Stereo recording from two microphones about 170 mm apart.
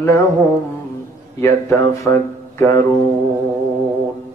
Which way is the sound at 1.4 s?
15° left (ahead or behind).